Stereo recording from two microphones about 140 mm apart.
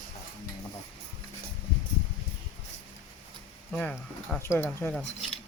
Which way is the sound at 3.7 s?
5° left (ahead or behind).